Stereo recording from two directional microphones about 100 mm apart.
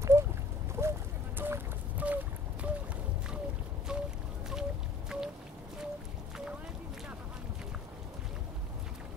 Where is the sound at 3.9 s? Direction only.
5° right (ahead or behind).